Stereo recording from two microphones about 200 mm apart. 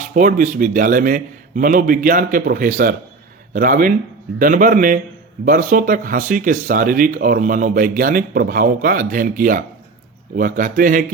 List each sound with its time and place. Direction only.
0.1 s speech: 40° right (ahead or behind)